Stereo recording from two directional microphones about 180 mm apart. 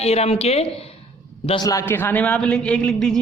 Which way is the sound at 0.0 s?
35° left (ahead or behind).